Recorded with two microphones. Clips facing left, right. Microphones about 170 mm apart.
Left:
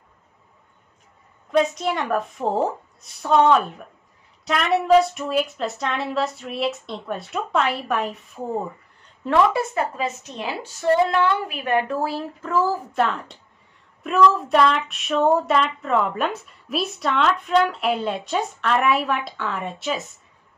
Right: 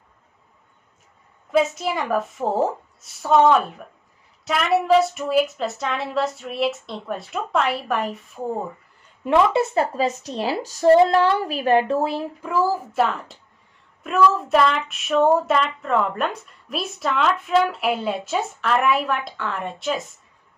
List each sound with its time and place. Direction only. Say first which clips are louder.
1.5 s speech: even; 5° right (ahead or behind)
9.2 s a woman's voice: right 1 dB; 20° right (ahead or behind)
12.0 s a woman's voice: right 2 dB; 15° right (ahead or behind); by 20.0 s centre (ahead or behind)